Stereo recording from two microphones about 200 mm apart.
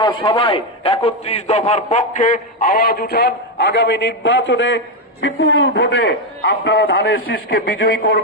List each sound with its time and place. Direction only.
0.0 s a man's voice: 20° left (ahead or behind); by 8.1 s 55° left (ahead or behind)